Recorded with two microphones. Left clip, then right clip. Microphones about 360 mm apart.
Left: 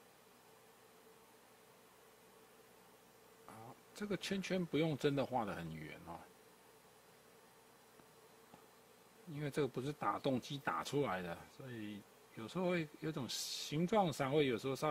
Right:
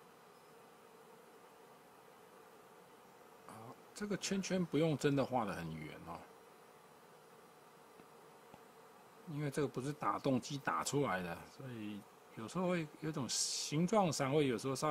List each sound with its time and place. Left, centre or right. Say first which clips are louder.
3.9 s speech: right 1 dB; left
9.4 s speech: even; left
12.4 s speech: even; left